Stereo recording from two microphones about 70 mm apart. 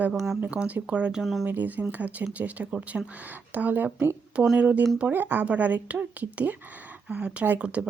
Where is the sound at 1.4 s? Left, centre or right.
Right.